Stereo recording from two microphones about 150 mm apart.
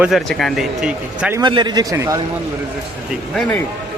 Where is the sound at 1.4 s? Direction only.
30° right (ahead or behind).